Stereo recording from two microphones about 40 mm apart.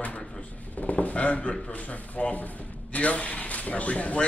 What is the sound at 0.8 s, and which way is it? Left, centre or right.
A man's voice, left.